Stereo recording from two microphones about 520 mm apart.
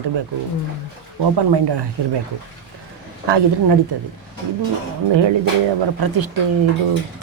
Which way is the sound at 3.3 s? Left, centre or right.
Right.